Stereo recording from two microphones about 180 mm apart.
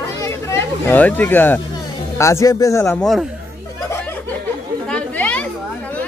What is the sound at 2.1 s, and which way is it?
Speech, 15° left (ahead or behind).